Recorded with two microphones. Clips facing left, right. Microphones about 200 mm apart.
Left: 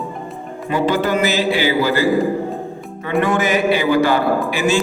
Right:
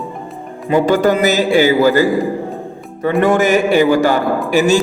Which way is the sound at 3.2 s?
45° right (ahead or behind).